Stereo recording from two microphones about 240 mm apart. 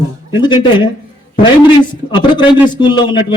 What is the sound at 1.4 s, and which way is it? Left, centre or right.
Speech, centre.